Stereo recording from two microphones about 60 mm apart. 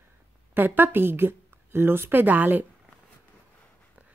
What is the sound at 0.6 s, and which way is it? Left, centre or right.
A woman's voice, right.